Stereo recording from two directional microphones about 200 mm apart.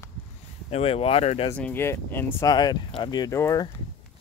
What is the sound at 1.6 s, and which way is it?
Speech, 10° left (ahead or behind).